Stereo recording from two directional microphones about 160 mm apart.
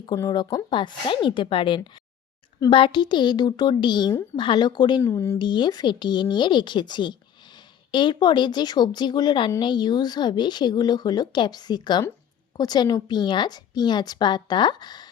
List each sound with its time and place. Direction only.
0.0 s a woman's voice: 25° left (ahead or behind)
5.4 s a woman's voice: 30° left (ahead or behind)